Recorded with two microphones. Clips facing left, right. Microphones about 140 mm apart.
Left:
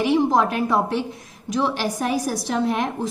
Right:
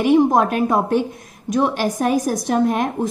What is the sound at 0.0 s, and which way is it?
A woman's voice, 50° right (ahead or behind).